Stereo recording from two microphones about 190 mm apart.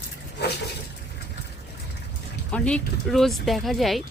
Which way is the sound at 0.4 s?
60° left (ahead or behind).